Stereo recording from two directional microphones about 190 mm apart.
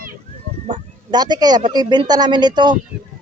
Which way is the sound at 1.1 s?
20° right (ahead or behind).